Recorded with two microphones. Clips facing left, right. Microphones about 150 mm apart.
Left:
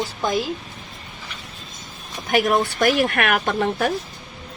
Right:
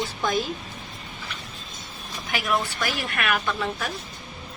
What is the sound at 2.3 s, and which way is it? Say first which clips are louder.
Speech: left 7 dB; 40° left (ahead or behind).